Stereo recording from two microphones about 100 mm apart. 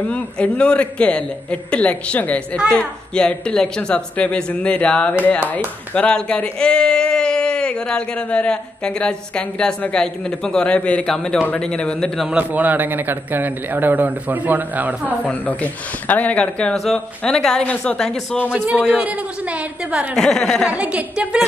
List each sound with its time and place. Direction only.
0.1 s speech: 10° left (ahead or behind)
12.3 s a man's voice: 15° right (ahead or behind)
15.2 s speech: 15° left (ahead or behind)
18.5 s a man's voice: 10° right (ahead or behind)
20.2 s speech: 5° left (ahead or behind)
20.6 s a man's voice: 10° right (ahead or behind)